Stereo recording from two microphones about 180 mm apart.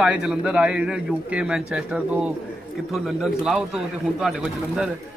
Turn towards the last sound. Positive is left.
turn(degrees=0)  # may be behind; listen again after turning